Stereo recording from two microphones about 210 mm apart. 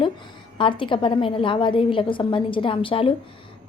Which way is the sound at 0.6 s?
25° left (ahead or behind).